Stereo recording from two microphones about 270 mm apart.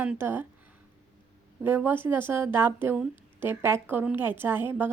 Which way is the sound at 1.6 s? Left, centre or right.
Centre.